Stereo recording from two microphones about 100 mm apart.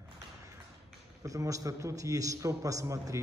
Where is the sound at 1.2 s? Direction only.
35° right (ahead or behind).